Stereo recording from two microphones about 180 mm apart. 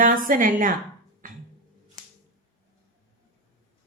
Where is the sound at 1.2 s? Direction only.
50° right (ahead or behind).